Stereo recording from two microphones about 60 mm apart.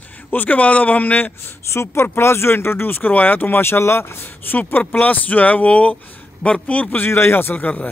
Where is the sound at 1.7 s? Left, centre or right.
Left.